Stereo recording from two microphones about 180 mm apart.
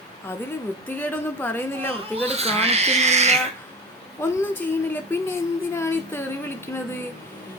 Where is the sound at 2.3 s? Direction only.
35° right (ahead or behind).